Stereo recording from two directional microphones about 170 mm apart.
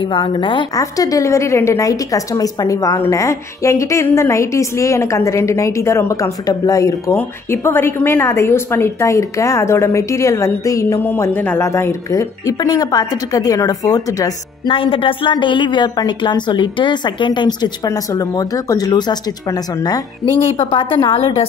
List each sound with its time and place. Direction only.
0.1 s a woman's voice: 30° left (ahead or behind)